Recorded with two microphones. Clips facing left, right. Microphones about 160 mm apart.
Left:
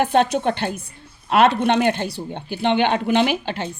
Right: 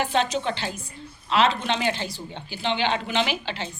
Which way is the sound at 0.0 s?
55° left (ahead or behind).